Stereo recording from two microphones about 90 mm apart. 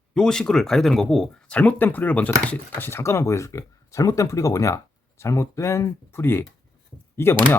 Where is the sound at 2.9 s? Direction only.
30° left (ahead or behind).